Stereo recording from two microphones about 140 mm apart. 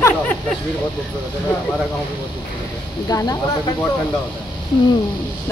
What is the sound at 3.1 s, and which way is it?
Speech, 25° left (ahead or behind).